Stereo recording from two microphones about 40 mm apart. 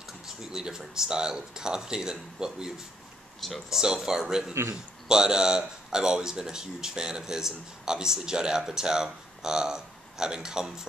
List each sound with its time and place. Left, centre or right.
0.5 s speech: centre
3.3 s speech: centre
3.7 s speech: centre